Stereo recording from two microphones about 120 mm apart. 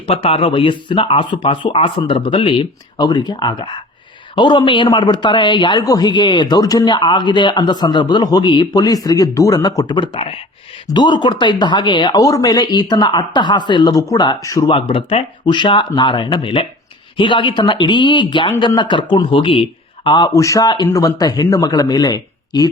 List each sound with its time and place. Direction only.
0.0 s speech: 55° left (ahead or behind); by 14.3 s 35° left (ahead or behind)
14.7 s speech: 50° left (ahead or behind); by 22.7 s 30° left (ahead or behind)